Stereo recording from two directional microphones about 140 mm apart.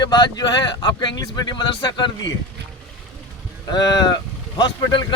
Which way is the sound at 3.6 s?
30° left (ahead or behind).